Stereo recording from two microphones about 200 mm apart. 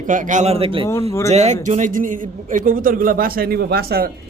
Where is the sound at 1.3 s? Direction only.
35° right (ahead or behind); by 4.0 s 50° right (ahead or behind).